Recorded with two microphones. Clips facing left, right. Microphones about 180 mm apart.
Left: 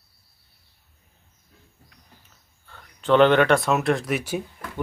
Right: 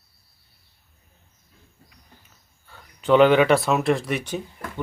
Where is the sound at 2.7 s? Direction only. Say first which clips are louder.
Right 1 dB; 10° right (ahead or behind).